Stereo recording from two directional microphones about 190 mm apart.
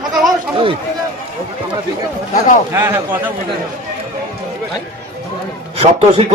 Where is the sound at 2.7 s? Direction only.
10° right (ahead or behind).